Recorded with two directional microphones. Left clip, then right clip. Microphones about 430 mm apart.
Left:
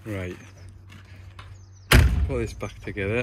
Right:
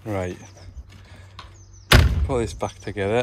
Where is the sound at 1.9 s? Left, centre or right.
Centre.